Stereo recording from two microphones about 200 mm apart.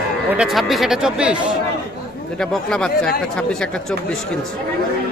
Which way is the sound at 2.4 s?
5° left (ahead or behind).